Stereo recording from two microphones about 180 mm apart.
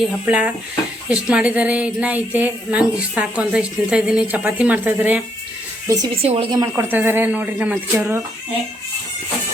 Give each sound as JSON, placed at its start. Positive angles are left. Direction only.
{"t": 0.0, "sound": "speech", "side_deg": -5}
{"t": 6.2, "sound": "a woman's voice", "side_deg": -30}
{"t": 6.8, "sound": "speech", "side_deg": -10}